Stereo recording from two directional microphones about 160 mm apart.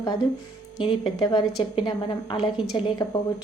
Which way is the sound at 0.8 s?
30° left (ahead or behind).